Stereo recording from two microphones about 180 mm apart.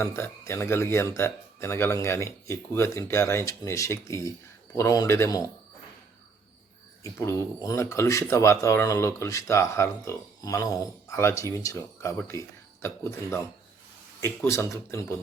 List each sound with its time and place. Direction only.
0.0 s speech: 15° left (ahead or behind)
7.0 s speech: 15° left (ahead or behind)